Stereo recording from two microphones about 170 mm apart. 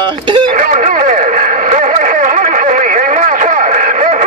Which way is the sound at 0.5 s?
50° right (ahead or behind).